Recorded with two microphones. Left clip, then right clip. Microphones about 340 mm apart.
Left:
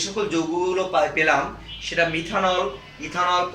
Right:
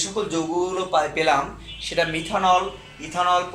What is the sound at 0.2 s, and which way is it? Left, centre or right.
Speech, centre.